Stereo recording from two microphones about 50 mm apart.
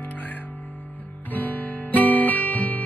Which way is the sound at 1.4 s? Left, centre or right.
Left.